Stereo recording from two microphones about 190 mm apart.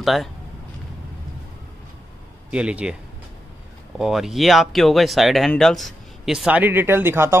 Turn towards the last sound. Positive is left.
turn(degrees=-10)  # may be behind; listen again after turning